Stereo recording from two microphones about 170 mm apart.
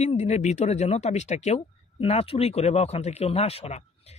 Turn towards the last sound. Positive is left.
turn(degrees=40)  # may be behind; listen again after turning